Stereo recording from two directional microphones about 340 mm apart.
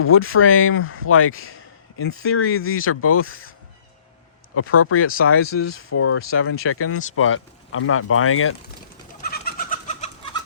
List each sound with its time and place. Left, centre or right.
0.0 s speech: left
4.5 s speech: left
9.2 s bird: left